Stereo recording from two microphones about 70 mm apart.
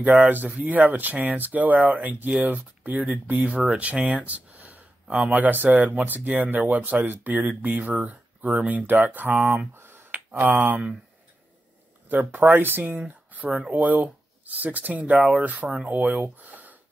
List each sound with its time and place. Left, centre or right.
0.0 s speech: right
10.1 s speech: right
12.1 s speech: right